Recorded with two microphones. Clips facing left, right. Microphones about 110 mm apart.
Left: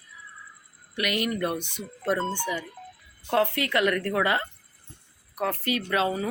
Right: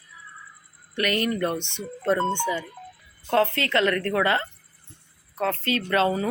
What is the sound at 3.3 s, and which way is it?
Speech, 15° left (ahead or behind).